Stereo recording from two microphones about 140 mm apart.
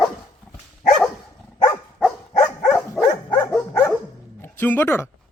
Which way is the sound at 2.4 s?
5° left (ahead or behind).